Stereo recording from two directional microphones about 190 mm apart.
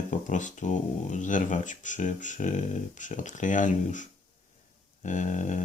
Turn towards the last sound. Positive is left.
turn(degrees=40)  # may be behind; listen again after turning